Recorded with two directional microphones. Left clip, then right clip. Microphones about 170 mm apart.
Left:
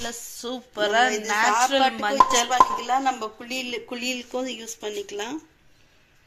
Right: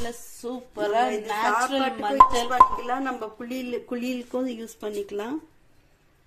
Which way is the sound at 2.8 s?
50° right (ahead or behind).